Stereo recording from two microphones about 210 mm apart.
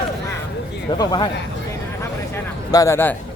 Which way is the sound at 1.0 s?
20° left (ahead or behind).